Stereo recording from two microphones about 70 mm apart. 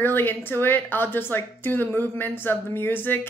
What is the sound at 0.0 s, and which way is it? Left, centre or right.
A woman's voice, left.